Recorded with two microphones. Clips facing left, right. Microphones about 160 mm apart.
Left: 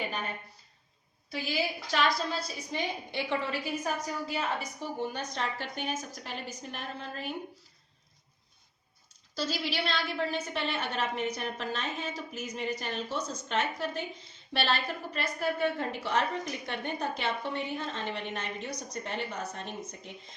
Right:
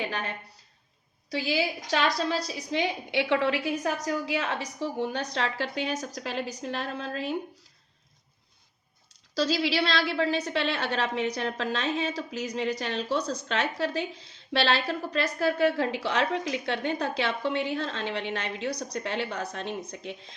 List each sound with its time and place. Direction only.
0.1 s a woman's voice: 80° right
2.1 s a woman's voice: 80° right
9.3 s a woman's voice: 75° right (ahead or behind)